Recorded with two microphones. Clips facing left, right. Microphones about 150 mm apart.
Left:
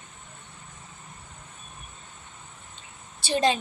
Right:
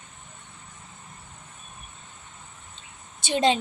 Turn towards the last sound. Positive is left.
turn(degrees=-20)  # may be behind; listen again after turning